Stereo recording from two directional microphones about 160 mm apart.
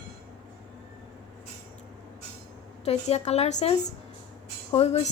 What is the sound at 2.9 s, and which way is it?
A woman's voice, 45° left (ahead or behind).